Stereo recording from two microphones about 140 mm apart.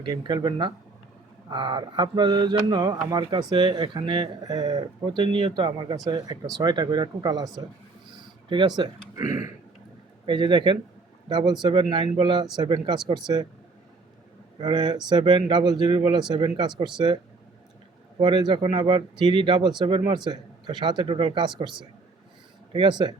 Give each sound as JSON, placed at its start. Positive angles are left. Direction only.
{"t": 0.0, "sound": "speech", "side_deg": -30}
{"t": 14.6, "sound": "speech", "side_deg": -30}
{"t": 18.2, "sound": "speech", "side_deg": -30}
{"t": 22.7, "sound": "speech", "side_deg": -30}